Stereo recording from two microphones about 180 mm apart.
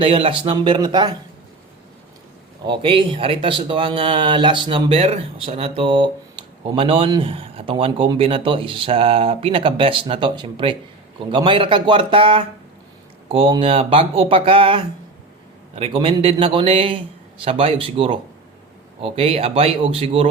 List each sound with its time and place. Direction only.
0.0 s speech: 30° right (ahead or behind)
2.6 s a man's voice: 30° right (ahead or behind)